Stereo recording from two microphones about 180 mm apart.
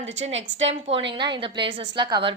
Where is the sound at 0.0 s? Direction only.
35° right (ahead or behind).